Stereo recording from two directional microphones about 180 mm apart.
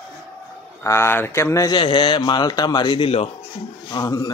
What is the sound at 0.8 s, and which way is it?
A man's voice, 15° left (ahead or behind).